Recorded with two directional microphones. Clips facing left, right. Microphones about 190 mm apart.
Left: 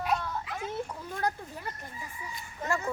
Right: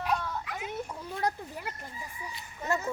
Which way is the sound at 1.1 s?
15° right (ahead or behind).